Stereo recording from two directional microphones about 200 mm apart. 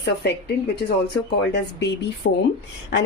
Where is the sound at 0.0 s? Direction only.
55° left (ahead or behind).